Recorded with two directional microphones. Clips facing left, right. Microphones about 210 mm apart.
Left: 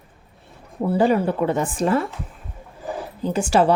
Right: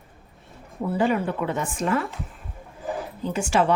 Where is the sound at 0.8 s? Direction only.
35° left (ahead or behind).